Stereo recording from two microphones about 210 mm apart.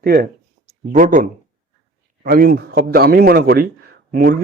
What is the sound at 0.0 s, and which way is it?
A man's voice, 50° right (ahead or behind).